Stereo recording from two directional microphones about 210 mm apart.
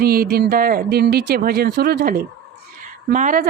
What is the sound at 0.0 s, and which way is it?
A woman's voice, 45° right (ahead or behind).